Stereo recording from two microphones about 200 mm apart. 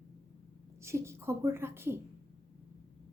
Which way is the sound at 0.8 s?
15° right (ahead or behind).